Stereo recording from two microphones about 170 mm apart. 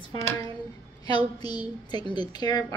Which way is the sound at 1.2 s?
25° left (ahead or behind).